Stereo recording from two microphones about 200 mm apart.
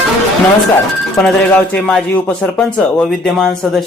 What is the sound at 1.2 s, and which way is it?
Speech, 5° left (ahead or behind).